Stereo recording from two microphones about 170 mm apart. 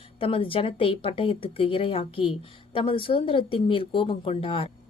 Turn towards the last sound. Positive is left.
turn(degrees=30)  # may be behind; listen again after turning